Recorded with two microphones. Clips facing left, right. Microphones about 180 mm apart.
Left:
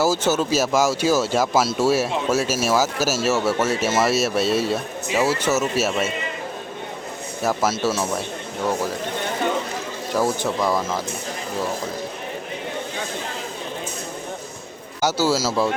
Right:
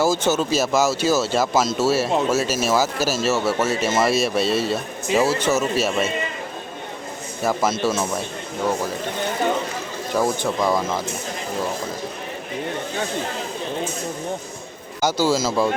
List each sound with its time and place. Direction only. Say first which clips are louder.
0.0 s speech: even; 10° left (ahead or behind)
7.4 s speech: right 1 dB; 5° left (ahead or behind)
10.2 s speech: even; 5° left (ahead or behind)
15.0 s speech: right 1 dB; 10° left (ahead or behind)